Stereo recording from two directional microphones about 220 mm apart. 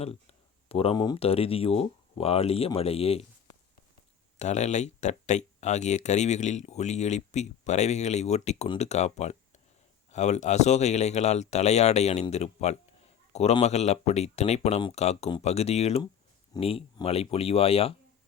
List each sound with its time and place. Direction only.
0.7 s speech: 25° left (ahead or behind)